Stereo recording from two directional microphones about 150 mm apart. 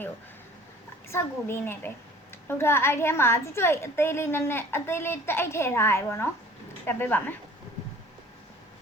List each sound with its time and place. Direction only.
1.1 s a woman's voice: 15° left (ahead or behind)